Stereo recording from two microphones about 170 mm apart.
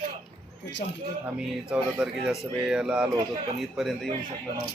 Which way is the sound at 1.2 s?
5° right (ahead or behind).